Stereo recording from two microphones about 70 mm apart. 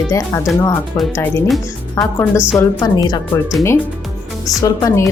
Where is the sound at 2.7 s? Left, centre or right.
Left.